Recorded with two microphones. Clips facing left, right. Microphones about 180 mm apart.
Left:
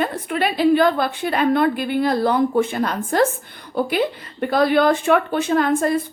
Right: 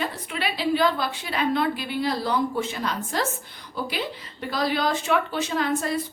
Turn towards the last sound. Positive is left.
turn(degrees=50)  # may be behind; listen again after turning